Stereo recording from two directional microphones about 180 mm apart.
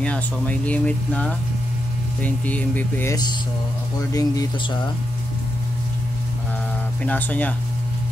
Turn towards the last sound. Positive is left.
turn(degrees=10)  # may be behind; listen again after turning